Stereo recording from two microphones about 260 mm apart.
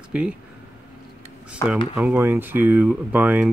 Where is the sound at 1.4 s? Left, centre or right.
Centre.